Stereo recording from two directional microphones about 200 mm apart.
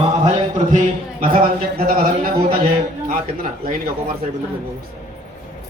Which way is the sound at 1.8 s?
45° right (ahead or behind).